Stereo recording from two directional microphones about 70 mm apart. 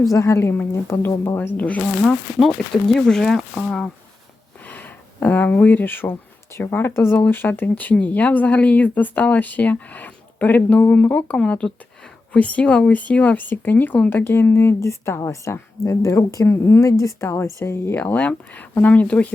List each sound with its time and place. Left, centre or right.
0.1 s speech: left
1.4 s speech: left
2.8 s speech: centre
4.7 s speech: left
16.5 s speech: left; by 19.3 s centre